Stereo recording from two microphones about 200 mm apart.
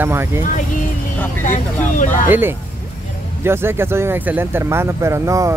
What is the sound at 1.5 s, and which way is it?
Speech, 40° left (ahead or behind).